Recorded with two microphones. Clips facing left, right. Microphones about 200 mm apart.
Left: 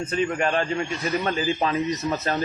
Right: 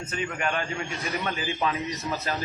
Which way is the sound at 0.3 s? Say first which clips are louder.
Left 2 dB; 35° left (ahead or behind).